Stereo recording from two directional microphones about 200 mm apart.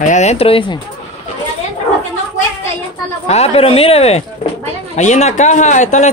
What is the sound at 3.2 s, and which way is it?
Speech, 30° left (ahead or behind).